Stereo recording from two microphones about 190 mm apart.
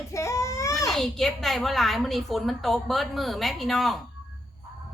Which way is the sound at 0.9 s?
Centre (ahead or behind).